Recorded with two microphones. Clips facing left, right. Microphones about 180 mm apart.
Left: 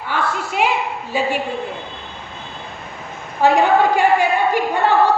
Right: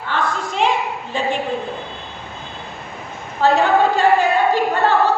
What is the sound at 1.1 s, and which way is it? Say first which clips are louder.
Speech: left 2 dB; 10° left (ahead or behind).